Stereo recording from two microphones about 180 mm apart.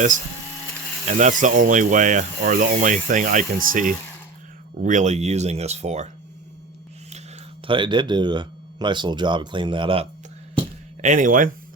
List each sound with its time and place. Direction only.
1.0 s speech: 45° right (ahead or behind)
7.7 s speech: 25° right (ahead or behind)
11.0 s speech: 45° right (ahead or behind)